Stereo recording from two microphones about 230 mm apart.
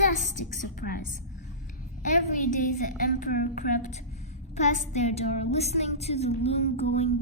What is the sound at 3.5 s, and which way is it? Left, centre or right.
A woman's voice, left.